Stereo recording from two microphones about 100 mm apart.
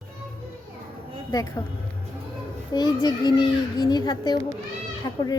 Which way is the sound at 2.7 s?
45° left (ahead or behind).